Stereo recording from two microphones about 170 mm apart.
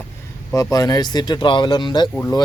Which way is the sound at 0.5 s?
20° left (ahead or behind).